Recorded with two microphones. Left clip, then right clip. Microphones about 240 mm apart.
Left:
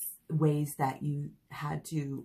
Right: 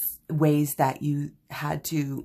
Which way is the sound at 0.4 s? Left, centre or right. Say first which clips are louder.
Right 8 dB; right.